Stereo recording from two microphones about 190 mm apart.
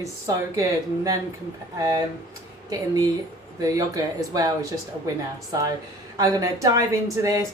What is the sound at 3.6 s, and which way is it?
A man's voice, 20° right (ahead or behind).